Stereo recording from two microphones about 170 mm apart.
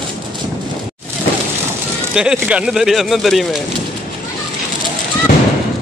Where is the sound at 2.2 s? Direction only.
5° right (ahead or behind).